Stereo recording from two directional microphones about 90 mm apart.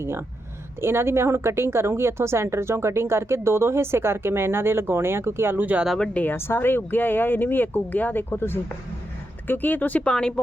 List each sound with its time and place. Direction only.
0.8 s a woman's voice: 30° right (ahead or behind)
6.0 s speech: 15° left (ahead or behind)
6.3 s speech: 25° left (ahead or behind); by 10.4 s 10° left (ahead or behind)